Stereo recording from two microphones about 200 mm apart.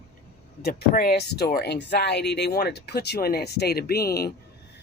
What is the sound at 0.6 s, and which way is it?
Speech, 45° left (ahead or behind).